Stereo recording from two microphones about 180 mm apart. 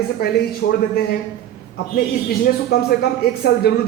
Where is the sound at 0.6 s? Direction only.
70° left (ahead or behind).